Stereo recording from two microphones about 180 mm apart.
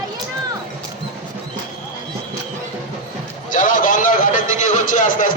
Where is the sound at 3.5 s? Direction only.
45° left (ahead or behind).